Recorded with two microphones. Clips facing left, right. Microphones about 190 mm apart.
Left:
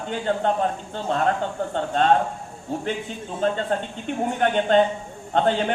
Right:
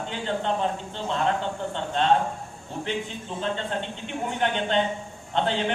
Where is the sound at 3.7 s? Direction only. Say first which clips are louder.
Left 5 dB; 45° left (ahead or behind).